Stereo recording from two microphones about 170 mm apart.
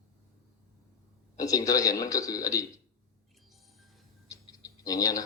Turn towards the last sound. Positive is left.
turn(degrees=20)  # may be behind; listen again after turning